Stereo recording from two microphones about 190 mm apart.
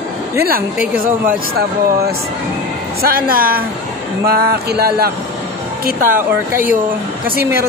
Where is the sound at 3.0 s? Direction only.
50° right (ahead or behind).